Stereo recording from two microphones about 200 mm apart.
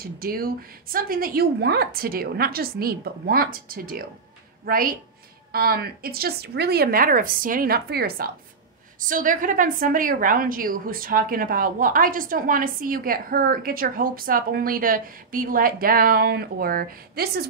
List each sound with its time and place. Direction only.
0.0 s a woman's voice: 45° right (ahead or behind)